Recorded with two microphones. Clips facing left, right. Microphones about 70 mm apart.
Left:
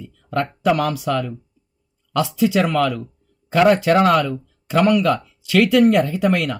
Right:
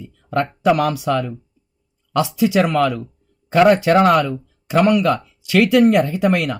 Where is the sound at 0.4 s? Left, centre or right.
Centre.